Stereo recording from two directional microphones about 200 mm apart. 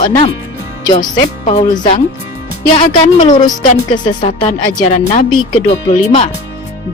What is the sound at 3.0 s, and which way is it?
Speech, 35° left (ahead or behind).